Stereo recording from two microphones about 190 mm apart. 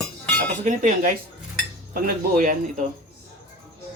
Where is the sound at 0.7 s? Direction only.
45° right (ahead or behind).